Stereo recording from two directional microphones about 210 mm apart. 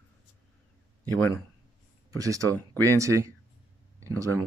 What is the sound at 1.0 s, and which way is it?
Speech, 10° left (ahead or behind).